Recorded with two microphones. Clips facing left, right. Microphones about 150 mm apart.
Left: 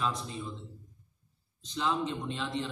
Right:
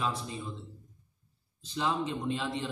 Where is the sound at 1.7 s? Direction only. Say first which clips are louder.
Even; 5° right (ahead or behind).